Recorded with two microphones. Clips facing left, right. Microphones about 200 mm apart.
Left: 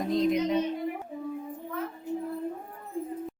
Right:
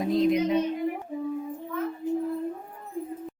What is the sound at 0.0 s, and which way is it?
Speech, centre (ahead or behind).